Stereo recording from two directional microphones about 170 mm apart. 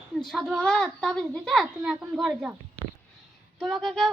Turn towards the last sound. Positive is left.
turn(degrees=0)  # may be behind; listen again after turning